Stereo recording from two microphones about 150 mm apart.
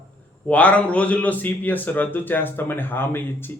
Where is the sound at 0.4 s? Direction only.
10° left (ahead or behind).